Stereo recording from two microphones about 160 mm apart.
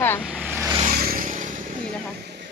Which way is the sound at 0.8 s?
65° right (ahead or behind).